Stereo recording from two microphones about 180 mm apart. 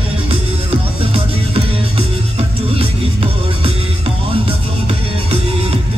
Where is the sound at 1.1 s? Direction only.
30° right (ahead or behind).